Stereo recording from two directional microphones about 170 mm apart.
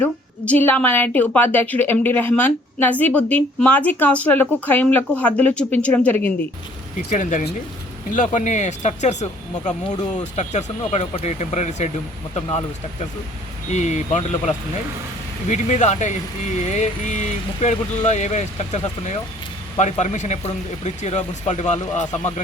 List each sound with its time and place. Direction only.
0.0 s a woman's voice: 10° left (ahead or behind)
7.1 s speech: 45° left (ahead or behind)
10.3 s speech: 45° left (ahead or behind)
13.7 s speech: 45° left (ahead or behind)